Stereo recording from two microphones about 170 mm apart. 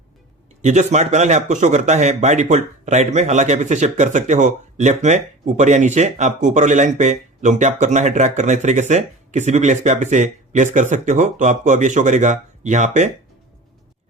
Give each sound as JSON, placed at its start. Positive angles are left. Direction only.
{"t": 0.6, "sound": "speech", "side_deg": -45}